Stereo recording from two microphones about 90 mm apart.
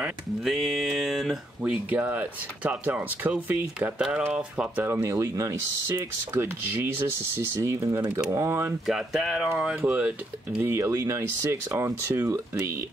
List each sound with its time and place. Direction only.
0.0 s speech: 5° right (ahead or behind)
1.6 s speech: 15° right (ahead or behind)
4.8 s speech: 30° right (ahead or behind)
8.8 s speech: centre (ahead or behind)
9.8 s speech: 15° right (ahead or behind)
10.7 s speech: 30° right (ahead or behind)